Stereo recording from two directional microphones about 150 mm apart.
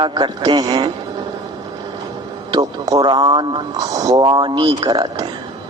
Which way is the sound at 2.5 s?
25° right (ahead or behind).